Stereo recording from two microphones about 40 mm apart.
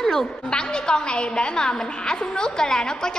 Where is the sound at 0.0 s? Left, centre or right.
Centre.